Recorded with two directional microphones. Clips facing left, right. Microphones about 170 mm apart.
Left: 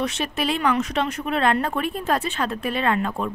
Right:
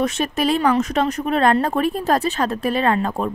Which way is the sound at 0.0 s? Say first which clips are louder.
Right 5 dB; 45° right (ahead or behind).